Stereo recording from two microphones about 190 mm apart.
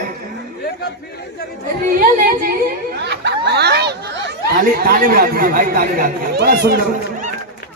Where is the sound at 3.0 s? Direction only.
65° right (ahead or behind).